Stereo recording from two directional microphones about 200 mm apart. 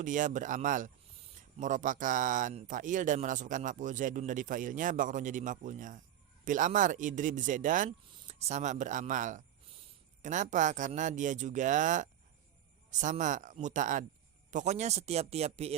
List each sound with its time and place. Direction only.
0.0 s speech: 40° right (ahead or behind)